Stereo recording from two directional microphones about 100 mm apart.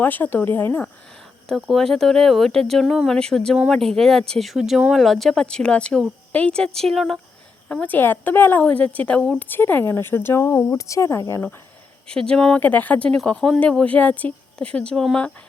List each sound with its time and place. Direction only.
0.0 s speech: 20° left (ahead or behind)
1.5 s speech: centre (ahead or behind)
7.7 s speech: 15° left (ahead or behind)
12.0 s speech: 10° left (ahead or behind)